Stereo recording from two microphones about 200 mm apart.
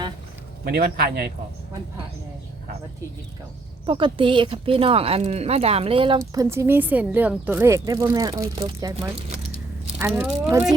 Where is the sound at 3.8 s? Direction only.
25° right (ahead or behind).